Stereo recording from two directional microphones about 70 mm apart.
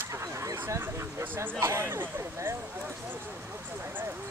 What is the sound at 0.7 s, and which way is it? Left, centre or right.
Speech, right.